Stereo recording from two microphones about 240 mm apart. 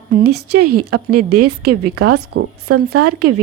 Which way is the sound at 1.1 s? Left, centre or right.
Right.